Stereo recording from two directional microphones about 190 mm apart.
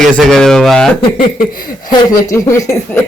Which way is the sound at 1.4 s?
50° left (ahead or behind).